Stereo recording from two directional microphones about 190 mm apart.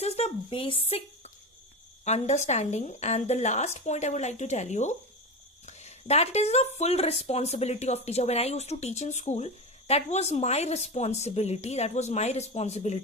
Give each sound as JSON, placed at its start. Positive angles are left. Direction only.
{"t": 0.0, "sound": "speech", "side_deg": 30}